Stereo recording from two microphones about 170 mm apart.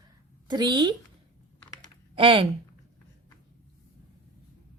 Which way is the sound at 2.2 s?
30° right (ahead or behind).